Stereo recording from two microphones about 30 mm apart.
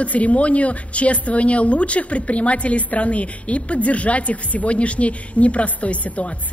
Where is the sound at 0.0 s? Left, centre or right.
Left.